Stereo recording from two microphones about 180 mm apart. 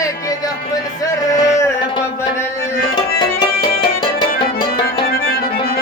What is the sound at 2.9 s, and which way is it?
Music, 25° left (ahead or behind).